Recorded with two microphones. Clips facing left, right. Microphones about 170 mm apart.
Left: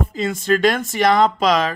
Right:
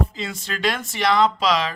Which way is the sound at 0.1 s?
50° left (ahead or behind).